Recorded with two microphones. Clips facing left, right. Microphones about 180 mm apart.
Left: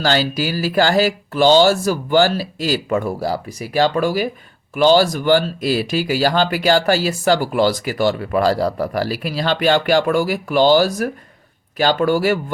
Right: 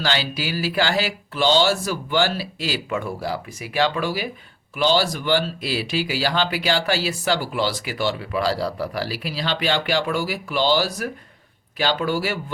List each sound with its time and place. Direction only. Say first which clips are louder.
0.0 s speech: left 6 dB; 45° left (ahead or behind)